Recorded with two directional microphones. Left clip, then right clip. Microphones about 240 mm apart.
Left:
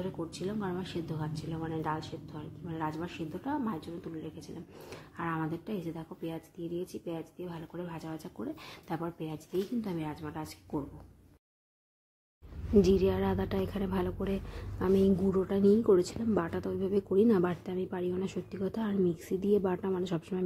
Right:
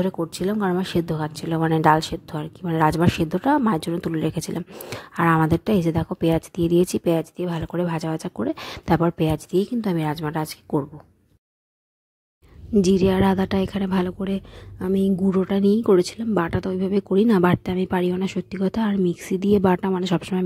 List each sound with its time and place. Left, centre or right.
0.0 s a woman's voice: right
12.7 s a woman's voice: right